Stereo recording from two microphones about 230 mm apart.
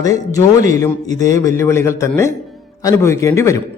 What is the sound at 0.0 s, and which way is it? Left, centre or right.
A man's voice, centre.